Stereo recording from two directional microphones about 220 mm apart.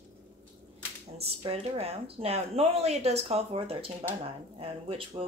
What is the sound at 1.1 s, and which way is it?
Speech, 25° right (ahead or behind).